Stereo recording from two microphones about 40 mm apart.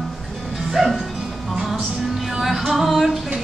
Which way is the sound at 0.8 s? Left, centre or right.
Centre.